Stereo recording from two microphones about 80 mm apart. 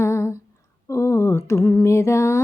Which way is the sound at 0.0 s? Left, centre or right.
Left.